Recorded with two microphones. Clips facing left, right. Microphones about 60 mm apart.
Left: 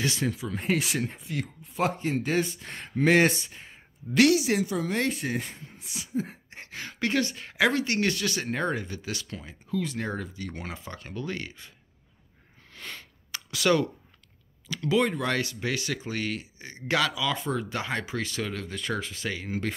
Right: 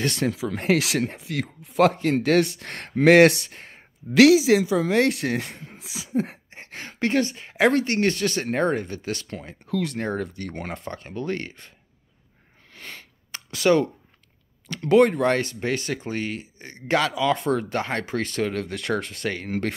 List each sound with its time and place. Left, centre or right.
0.0 s speech: right
0.5 s speech: right
2.1 s speech: right
6.5 s a sound: right
7.6 s speech: right
9.7 s speech: right
9.9 s speech: right
10.2 s speech: right
10.5 s speech: right
10.9 s speech: right
12.7 s sniff: right
14.7 s speech: right
15.2 s speech: right
17.4 s speech: right